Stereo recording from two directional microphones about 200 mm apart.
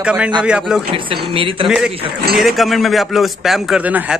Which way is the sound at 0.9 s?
25° right (ahead or behind).